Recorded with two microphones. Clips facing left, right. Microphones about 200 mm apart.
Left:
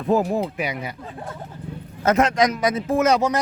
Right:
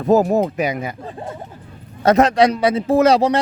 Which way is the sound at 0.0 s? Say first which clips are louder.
Right 6 dB; 40° right (ahead or behind).